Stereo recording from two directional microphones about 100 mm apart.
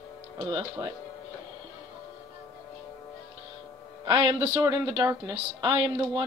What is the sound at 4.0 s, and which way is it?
Speech, 40° right (ahead or behind).